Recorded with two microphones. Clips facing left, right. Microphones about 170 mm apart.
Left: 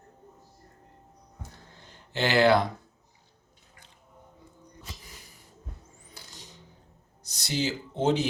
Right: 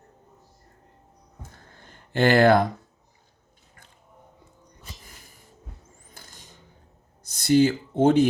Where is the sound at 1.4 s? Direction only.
50° right (ahead or behind).